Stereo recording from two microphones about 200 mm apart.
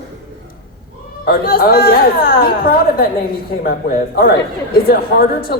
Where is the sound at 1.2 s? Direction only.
50° left (ahead or behind).